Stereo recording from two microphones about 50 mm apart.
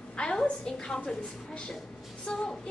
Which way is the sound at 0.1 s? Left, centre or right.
Centre.